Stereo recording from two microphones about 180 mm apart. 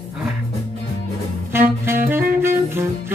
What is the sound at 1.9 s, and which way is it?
Saxophone, 10° right (ahead or behind).